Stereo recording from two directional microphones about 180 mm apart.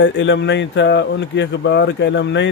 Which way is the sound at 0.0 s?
90° left.